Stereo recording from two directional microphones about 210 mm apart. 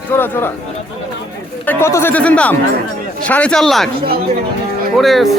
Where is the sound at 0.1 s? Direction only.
10° left (ahead or behind).